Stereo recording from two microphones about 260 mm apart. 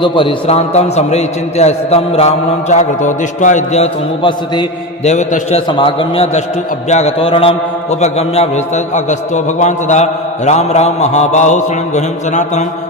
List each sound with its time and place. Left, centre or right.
0.0 s a man's voice: centre